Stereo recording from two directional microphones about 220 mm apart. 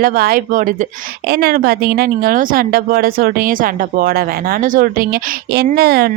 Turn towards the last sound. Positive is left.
turn(degrees=-45)  # may be behind; listen again after turning